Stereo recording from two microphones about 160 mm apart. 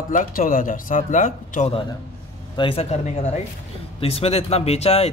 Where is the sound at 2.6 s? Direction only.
35° left (ahead or behind).